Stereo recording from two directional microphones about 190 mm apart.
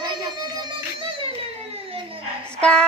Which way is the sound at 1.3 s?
30° right (ahead or behind).